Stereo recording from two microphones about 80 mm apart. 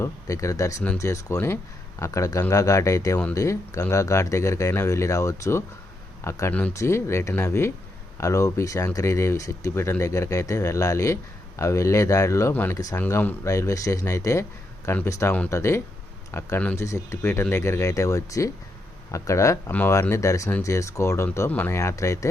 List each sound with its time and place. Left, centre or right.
0.0 s speech: left
13.1 s speech: left